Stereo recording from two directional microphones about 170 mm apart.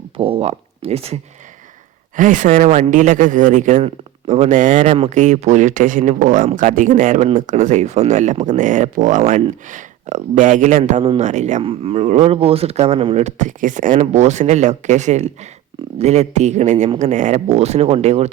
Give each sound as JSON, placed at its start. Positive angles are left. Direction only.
{"t": 0.2, "sound": "speech", "side_deg": -35}
{"t": 2.1, "sound": "speech", "side_deg": -50}